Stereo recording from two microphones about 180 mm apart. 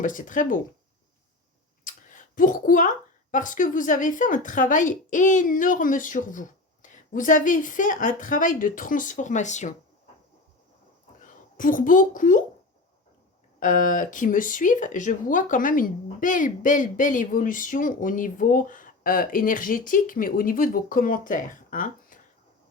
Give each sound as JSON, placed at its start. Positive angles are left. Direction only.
{"t": 0.0, "sound": "speech", "side_deg": 45}
{"t": 1.8, "sound": "clicking", "side_deg": 45}
{"t": 3.3, "sound": "speech", "side_deg": 45}
{"t": 11.2, "sound": "speech", "side_deg": 50}
{"t": 13.6, "sound": "speech", "side_deg": 45}